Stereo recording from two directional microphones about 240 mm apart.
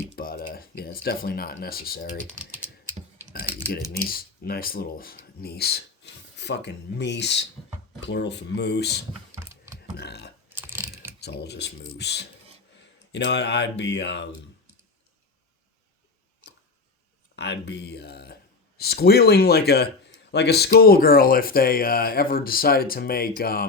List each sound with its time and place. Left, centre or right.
0.2 s speech: left
2.4 s typing: centre
3.9 s speech: left
9.3 s mechanisms: centre
10.0 s typing: left
10.5 s mechanisms: centre
11.2 s speech: left
17.3 s speech: left